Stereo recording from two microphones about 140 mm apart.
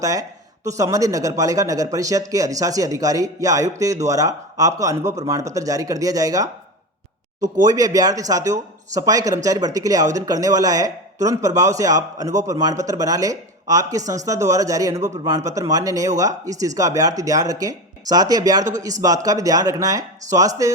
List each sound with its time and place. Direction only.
0.0 s speech: 25° right (ahead or behind)
7.7 s speech: 25° right (ahead or behind)